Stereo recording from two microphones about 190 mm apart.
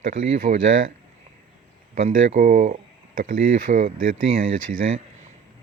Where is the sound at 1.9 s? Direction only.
40° right (ahead or behind).